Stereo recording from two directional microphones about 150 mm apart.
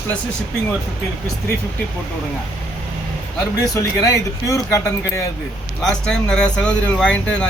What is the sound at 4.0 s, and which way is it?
Speech, 20° left (ahead or behind).